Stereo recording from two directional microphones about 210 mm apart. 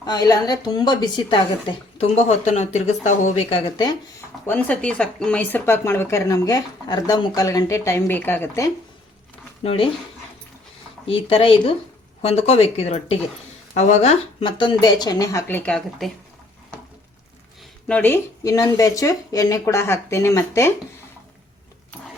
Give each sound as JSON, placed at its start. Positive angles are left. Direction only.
{"t": 0.0, "sound": "speech", "side_deg": 20}
{"t": 4.4, "sound": "speech", "side_deg": 5}
{"t": 9.6, "sound": "speech", "side_deg": 25}
{"t": 11.0, "sound": "speech", "side_deg": 25}
{"t": 17.8, "sound": "speech", "side_deg": 10}